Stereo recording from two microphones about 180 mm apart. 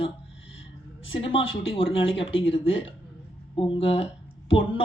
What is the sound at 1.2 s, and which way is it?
Speech, 30° left (ahead or behind).